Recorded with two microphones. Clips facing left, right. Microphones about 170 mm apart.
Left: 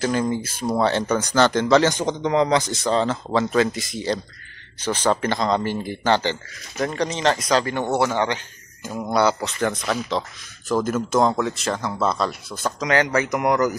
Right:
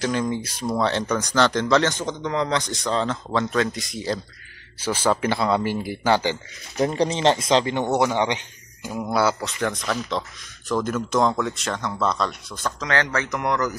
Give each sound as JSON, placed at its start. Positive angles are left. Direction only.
{"t": 0.0, "sound": "speech", "side_deg": 5}
{"t": 2.6, "sound": "speech", "side_deg": 5}
{"t": 6.8, "sound": "speech", "side_deg": -30}
{"t": 9.0, "sound": "speech", "side_deg": 0}